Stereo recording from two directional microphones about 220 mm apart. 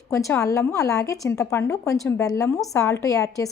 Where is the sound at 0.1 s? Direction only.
15° left (ahead or behind).